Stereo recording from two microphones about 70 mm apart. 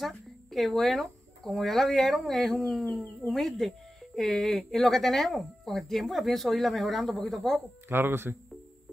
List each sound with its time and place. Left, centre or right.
0.0 s speech: centre
7.9 s speech: right